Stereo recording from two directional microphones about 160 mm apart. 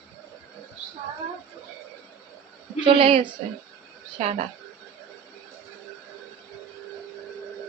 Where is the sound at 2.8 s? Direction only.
30° right (ahead or behind).